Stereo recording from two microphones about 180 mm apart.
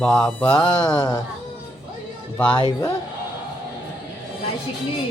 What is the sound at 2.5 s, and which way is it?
Speech, 25° left (ahead or behind).